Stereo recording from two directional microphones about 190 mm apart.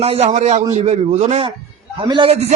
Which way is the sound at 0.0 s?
35° right (ahead or behind).